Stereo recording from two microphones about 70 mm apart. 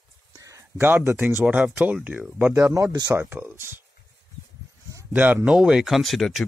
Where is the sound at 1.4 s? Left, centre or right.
Centre.